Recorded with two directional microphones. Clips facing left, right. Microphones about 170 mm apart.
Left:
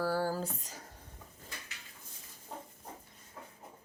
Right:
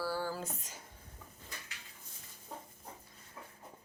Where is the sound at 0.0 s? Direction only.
45° left (ahead or behind).